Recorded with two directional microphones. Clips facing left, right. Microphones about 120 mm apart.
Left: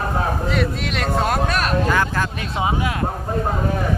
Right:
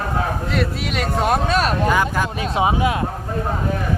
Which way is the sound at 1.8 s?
15° right (ahead or behind).